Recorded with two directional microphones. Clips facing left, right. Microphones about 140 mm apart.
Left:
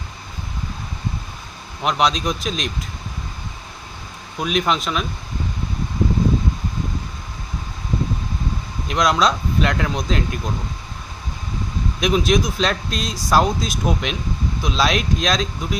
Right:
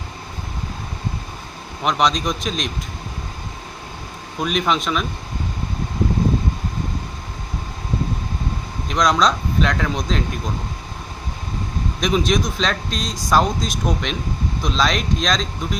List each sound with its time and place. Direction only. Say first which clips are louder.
1.8 s speech: even; centre (ahead or behind)
4.4 s speech: even; centre (ahead or behind)
8.9 s speech: even; 5° left (ahead or behind)
11.9 s speech: left 1 dB; 5° left (ahead or behind)